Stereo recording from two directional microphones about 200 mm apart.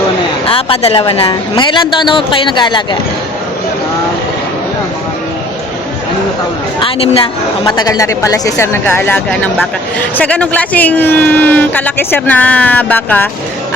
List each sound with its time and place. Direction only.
0.4 s a woman's voice: 30° left (ahead or behind)
6.7 s a woman's voice: 25° left (ahead or behind); by 13.2 s 10° left (ahead or behind)